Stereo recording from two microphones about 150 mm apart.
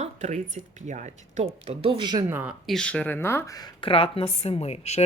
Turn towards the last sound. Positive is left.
turn(degrees=45)  # may be behind; listen again after turning